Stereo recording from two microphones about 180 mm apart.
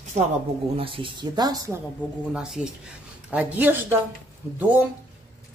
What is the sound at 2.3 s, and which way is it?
A woman's voice, 5° right (ahead or behind).